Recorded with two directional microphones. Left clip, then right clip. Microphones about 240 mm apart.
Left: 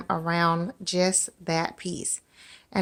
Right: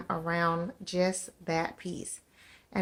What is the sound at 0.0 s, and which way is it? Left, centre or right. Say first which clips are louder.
Speech: left 5 dB; left.